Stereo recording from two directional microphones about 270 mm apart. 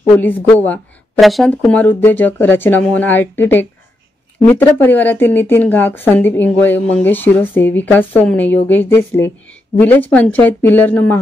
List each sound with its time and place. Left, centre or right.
0.2 s speech: centre